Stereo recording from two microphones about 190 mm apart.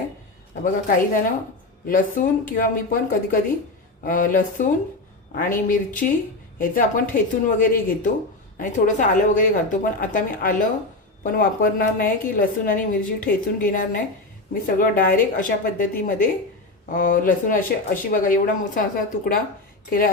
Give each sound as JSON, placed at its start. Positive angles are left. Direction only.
{"t": 0.6, "sound": "a woman's voice", "side_deg": 45}